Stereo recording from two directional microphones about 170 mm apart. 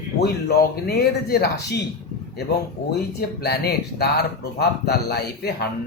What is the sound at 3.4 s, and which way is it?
Speech, 70° left (ahead or behind).